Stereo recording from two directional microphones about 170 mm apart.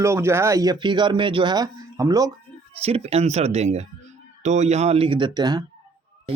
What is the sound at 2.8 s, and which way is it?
A man's voice, 35° right (ahead or behind).